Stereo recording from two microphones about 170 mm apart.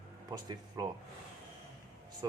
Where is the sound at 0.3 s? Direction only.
20° right (ahead or behind).